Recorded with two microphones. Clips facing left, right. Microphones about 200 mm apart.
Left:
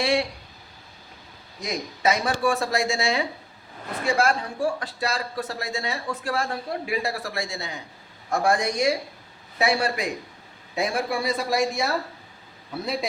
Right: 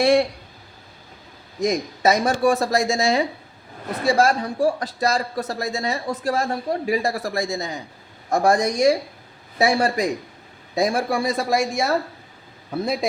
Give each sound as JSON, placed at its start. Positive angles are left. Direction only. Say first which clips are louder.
{"t": 0.0, "sound": "speech", "louder": "right 7 dB", "side_deg": -45}
{"t": 1.6, "sound": "speech", "louder": "right 5 dB", "side_deg": -40}